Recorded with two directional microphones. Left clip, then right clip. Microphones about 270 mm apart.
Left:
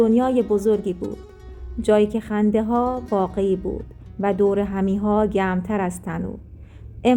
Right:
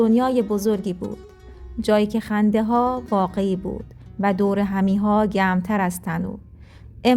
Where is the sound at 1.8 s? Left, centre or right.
Right.